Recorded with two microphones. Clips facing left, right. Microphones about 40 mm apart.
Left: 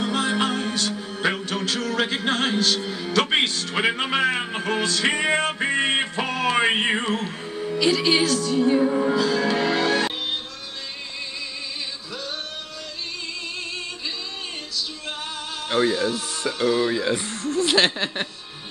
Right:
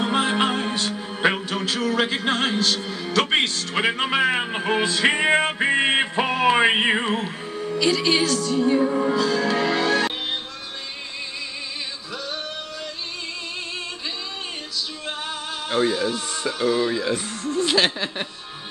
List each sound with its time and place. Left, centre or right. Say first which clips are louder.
0.0 s music: right 2 dB; right
1.5 s a man's voice: right 2 dB; centre
15.7 s speech: even; centre